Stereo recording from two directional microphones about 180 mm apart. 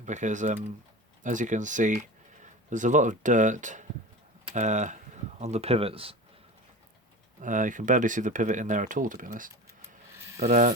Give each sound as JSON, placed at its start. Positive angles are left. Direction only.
{"t": 0.0, "sound": "speech", "side_deg": -45}
{"t": 7.4, "sound": "speech", "side_deg": -45}
{"t": 10.2, "sound": "mechanisms", "side_deg": -15}
{"t": 10.4, "sound": "speech", "side_deg": -45}